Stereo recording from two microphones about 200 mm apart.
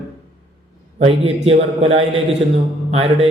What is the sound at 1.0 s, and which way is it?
A man's voice, 30° right (ahead or behind).